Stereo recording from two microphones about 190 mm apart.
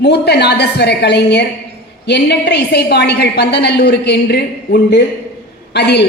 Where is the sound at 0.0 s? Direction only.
60° left (ahead or behind).